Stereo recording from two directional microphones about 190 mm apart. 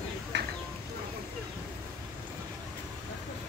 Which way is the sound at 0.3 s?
65° right (ahead or behind).